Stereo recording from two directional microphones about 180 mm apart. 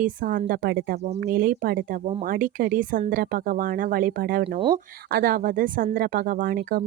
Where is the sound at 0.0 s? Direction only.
50° right (ahead or behind).